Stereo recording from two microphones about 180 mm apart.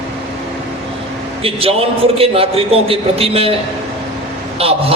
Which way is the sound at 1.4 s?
30° right (ahead or behind).